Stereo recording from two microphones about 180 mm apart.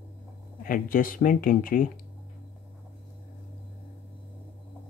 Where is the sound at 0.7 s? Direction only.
50° left (ahead or behind).